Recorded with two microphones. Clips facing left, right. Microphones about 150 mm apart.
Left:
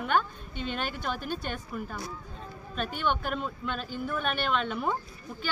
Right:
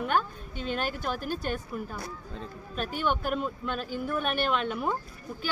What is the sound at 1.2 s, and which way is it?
Speech, 45° right (ahead or behind).